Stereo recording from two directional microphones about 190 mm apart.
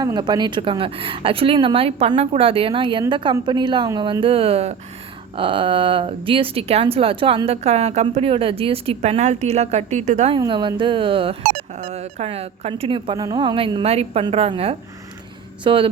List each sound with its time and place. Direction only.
0.0 s speech: 20° right (ahead or behind)